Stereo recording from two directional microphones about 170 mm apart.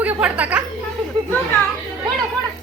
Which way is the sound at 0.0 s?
10° right (ahead or behind).